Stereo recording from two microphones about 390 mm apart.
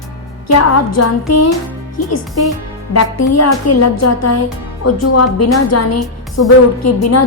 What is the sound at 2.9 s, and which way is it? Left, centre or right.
A woman's voice, left.